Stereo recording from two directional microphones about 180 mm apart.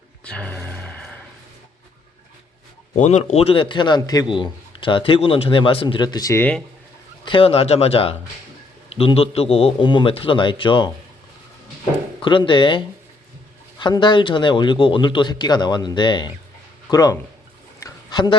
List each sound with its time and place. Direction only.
0.3 s music: 10° left (ahead or behind)
2.9 s a man's voice: 40° left (ahead or behind); by 6.6 s 10° left (ahead or behind)
7.3 s a man's voice: 30° left (ahead or behind)
12.2 s a man's voice: 25° left (ahead or behind)
13.8 s a man's voice: 25° left (ahead or behind)
17.7 s a sound: 20° left (ahead or behind)